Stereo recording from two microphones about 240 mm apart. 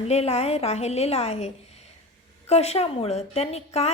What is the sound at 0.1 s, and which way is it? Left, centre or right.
A woman's voice, left.